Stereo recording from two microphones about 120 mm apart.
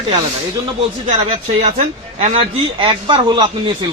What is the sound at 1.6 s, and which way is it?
A man's voice, 60° right (ahead or behind).